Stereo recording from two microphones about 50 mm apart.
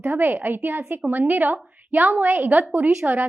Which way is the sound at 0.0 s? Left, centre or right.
Right.